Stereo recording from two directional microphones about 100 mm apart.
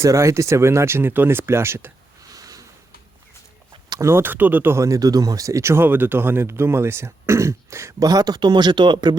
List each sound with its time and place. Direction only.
0.0 s speech: 30° right (ahead or behind)
2.3 s a sound: 35° right (ahead or behind)
4.0 s speech: 20° right (ahead or behind); by 9.1 s 50° right (ahead or behind)